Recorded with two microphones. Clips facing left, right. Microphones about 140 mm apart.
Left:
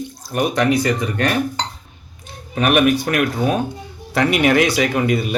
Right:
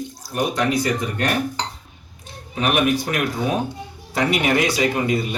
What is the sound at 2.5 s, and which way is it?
Speech, 65° left (ahead or behind).